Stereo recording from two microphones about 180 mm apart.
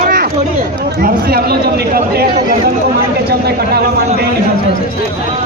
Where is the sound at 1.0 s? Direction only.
55° right (ahead or behind).